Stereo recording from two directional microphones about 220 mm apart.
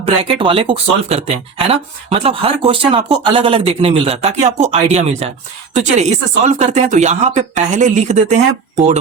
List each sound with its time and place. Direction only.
0.0 s speech: 25° right (ahead or behind)